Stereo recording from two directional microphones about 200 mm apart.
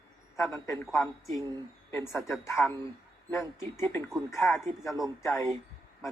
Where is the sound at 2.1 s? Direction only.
15° left (ahead or behind).